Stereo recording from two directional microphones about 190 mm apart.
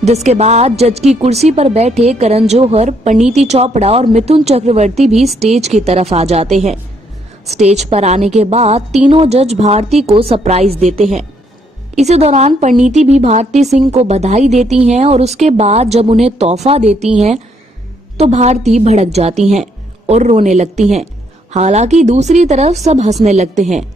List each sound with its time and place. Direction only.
0.0 s a woman's voice: 35° right (ahead or behind)
18.1 s a woman's voice: 35° right (ahead or behind)